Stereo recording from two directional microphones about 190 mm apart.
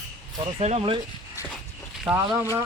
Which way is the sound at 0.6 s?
30° right (ahead or behind).